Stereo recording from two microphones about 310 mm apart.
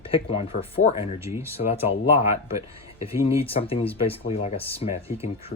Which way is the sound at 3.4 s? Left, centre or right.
Centre.